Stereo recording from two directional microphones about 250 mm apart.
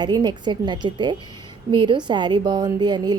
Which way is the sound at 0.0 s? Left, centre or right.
Centre.